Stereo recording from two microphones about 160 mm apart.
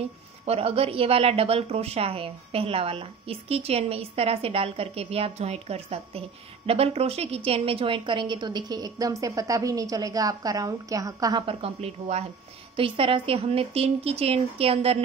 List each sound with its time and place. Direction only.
0.5 s a woman's voice: 40° right (ahead or behind); by 11.4 s 25° right (ahead or behind)
11.4 s a woman's voice: 40° right (ahead or behind)